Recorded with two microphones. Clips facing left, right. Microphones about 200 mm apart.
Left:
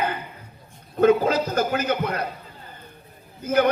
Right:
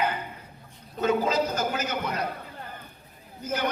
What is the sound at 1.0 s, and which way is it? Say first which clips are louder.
A man's voice: left 6 dB; 60° left (ahead or behind).